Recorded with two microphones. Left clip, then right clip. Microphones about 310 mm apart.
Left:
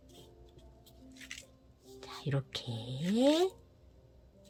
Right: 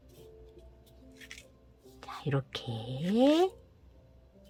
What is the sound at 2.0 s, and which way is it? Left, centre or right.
Speech, centre.